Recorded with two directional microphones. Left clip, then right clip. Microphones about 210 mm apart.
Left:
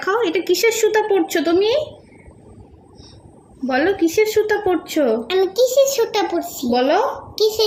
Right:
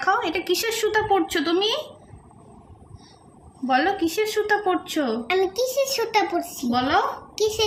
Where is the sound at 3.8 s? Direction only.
20° right (ahead or behind).